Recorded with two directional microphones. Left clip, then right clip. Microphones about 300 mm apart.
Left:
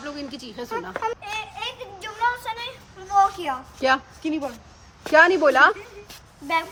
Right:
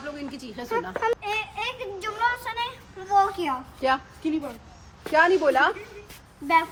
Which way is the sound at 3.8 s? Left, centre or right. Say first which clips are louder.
Left 3 dB; left.